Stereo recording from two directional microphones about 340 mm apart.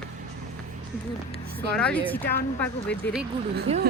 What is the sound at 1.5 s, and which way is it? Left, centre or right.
Speech, centre.